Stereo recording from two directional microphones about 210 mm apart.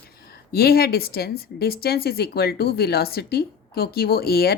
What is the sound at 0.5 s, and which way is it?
Speech, 45° left (ahead or behind).